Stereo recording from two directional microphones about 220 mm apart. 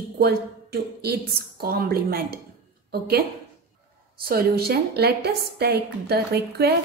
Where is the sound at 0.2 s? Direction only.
45° right (ahead or behind).